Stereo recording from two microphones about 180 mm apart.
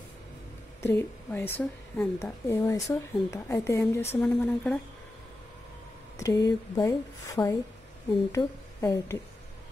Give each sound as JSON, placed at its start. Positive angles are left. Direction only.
{"t": 0.8, "sound": "a woman's voice", "side_deg": 15}
{"t": 4.2, "sound": "speech", "side_deg": 5}
{"t": 6.1, "sound": "a woman's voice", "side_deg": 20}